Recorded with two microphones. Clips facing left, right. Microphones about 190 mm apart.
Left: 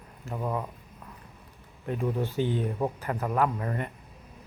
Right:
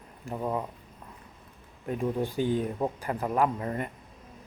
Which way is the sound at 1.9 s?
15° right (ahead or behind).